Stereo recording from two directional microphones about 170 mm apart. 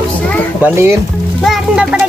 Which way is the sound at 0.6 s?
15° right (ahead or behind).